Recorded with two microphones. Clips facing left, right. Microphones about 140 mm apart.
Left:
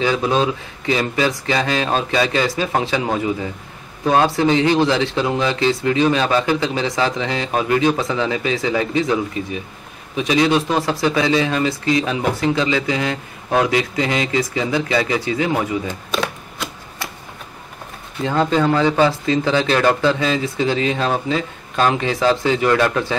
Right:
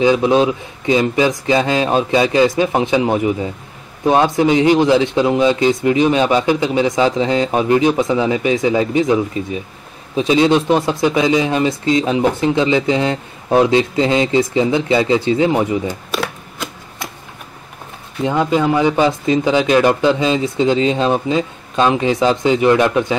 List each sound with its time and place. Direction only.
0.0 s a man's voice: 20° right (ahead or behind)
15.9 s camera: 5° right (ahead or behind)
18.2 s a man's voice: 10° right (ahead or behind)